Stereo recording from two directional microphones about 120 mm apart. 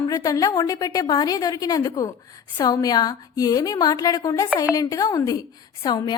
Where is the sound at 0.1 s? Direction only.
30° left (ahead or behind).